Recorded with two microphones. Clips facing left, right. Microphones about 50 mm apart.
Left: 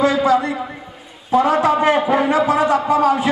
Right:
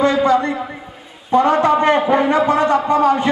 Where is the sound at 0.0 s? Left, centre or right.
Centre.